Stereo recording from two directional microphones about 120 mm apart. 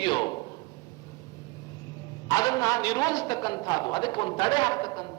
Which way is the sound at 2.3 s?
30° left (ahead or behind).